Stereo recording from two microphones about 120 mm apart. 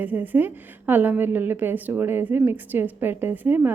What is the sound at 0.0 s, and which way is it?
A woman's voice, 15° right (ahead or behind).